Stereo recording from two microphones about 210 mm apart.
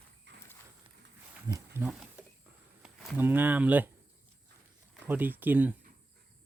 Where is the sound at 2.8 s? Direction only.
5° right (ahead or behind).